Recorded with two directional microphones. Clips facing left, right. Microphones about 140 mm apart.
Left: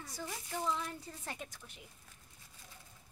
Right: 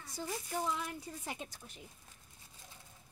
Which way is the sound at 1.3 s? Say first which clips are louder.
Right 1 dB; 30° right (ahead or behind).